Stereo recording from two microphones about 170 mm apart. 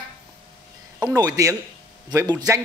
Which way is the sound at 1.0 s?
20° right (ahead or behind).